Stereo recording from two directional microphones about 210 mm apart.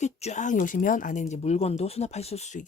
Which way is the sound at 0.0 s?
35° left (ahead or behind).